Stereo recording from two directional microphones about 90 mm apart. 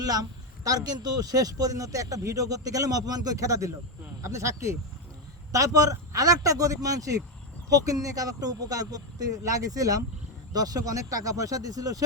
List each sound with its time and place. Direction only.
0.0 s speech: 45° right (ahead or behind)